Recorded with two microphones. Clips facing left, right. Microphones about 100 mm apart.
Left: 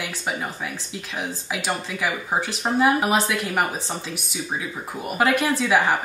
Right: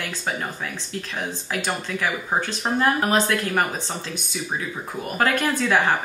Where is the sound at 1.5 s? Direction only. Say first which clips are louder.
Right 1 dB; 5° left (ahead or behind).